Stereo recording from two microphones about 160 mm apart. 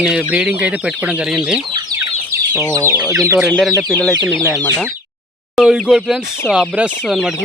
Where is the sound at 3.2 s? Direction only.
15° right (ahead or behind).